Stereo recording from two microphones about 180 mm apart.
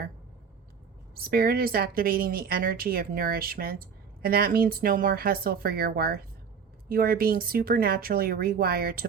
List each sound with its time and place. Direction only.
1.1 s speech: 55° right (ahead or behind)